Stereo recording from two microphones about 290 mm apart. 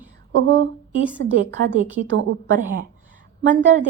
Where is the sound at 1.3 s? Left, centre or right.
Right.